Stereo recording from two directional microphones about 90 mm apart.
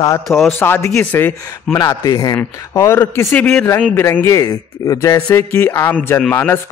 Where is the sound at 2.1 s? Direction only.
40° left (ahead or behind); by 3.6 s 15° left (ahead or behind).